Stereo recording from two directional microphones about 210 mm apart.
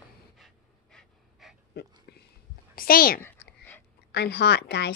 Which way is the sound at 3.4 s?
50° left (ahead or behind).